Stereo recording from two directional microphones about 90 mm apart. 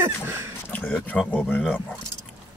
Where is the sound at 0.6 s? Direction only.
20° left (ahead or behind).